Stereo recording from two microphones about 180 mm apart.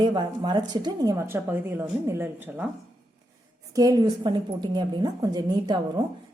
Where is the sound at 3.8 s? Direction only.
20° right (ahead or behind).